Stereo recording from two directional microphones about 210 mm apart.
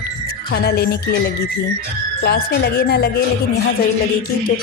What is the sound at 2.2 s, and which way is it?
Speech, 50° left (ahead or behind).